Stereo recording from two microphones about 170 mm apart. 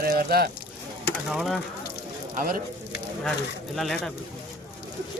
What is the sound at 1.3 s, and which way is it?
Speech, centre (ahead or behind).